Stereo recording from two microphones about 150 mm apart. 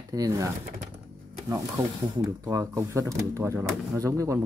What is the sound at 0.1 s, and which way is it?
Speech, 20° right (ahead or behind).